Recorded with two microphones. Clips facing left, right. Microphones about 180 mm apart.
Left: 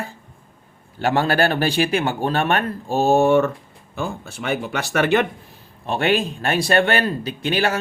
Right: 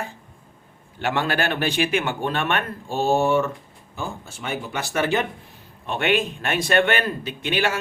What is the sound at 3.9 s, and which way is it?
Speech, 65° left (ahead or behind).